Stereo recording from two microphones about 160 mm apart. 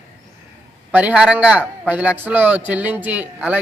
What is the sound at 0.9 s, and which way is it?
A man's voice, 5° right (ahead or behind).